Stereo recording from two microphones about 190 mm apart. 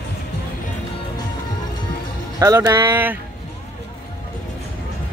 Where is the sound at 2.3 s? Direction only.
20° right (ahead or behind).